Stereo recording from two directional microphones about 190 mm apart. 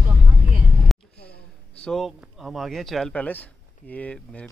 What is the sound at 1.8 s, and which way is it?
Speech, centre (ahead or behind).